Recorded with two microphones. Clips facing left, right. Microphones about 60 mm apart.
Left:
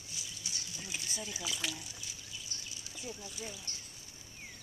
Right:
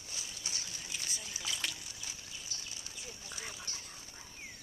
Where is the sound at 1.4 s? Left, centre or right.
Centre.